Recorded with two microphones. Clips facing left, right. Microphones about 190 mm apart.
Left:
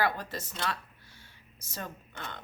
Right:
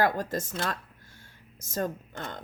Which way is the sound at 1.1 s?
45° right (ahead or behind).